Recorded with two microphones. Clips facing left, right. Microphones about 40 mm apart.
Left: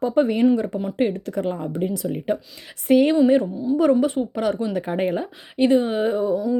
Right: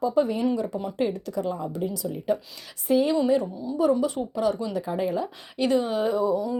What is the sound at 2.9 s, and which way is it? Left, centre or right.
Speech, left.